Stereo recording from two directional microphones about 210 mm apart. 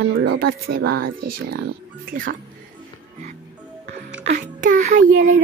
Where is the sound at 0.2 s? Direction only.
50° right (ahead or behind).